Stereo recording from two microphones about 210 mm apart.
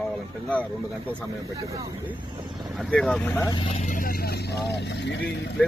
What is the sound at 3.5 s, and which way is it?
Speech, 25° left (ahead or behind).